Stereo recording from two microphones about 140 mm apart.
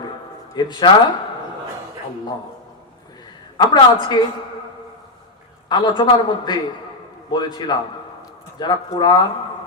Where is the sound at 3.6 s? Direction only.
30° left (ahead or behind).